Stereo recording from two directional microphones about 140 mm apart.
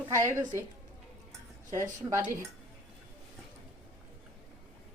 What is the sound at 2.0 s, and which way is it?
Speech, 20° right (ahead or behind).